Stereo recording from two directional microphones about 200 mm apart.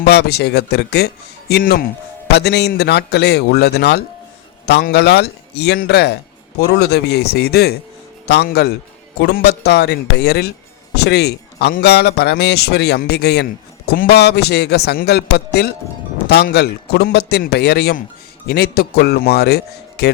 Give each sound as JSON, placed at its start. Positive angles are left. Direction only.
{"t": 0.0, "sound": "a man's voice", "side_deg": 55}